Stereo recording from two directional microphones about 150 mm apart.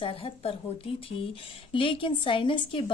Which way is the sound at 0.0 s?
35° left (ahead or behind).